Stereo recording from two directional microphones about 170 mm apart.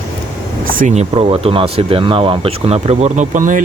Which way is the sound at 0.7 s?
50° right (ahead or behind).